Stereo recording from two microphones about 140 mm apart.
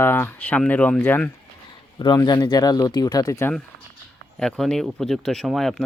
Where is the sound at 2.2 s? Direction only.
30° left (ahead or behind).